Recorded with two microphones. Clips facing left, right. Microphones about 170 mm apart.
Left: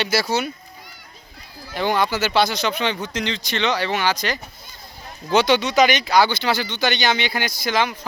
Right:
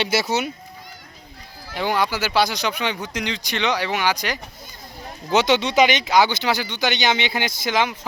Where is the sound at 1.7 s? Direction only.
10° right (ahead or behind).